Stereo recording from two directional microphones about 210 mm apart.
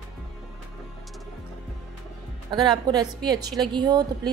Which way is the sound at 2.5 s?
20° right (ahead or behind).